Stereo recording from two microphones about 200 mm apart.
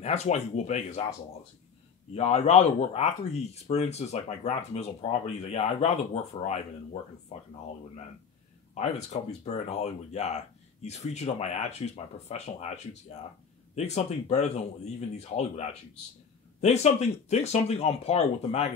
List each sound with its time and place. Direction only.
0.0 s speech: 35° left (ahead or behind)
2.1 s speech: 35° left (ahead or behind)
8.7 s speech: 35° left (ahead or behind)
16.6 s speech: 35° left (ahead or behind)